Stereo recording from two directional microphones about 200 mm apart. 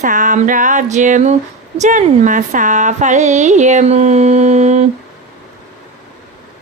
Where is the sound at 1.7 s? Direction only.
40° right (ahead or behind).